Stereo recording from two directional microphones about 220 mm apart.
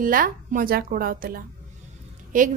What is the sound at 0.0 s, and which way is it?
A woman's voice, 40° right (ahead or behind).